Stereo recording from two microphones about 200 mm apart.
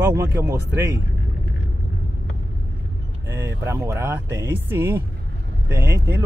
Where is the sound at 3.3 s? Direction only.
15° right (ahead or behind).